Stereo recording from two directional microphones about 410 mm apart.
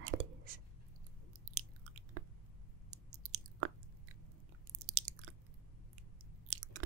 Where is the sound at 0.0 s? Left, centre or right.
Right.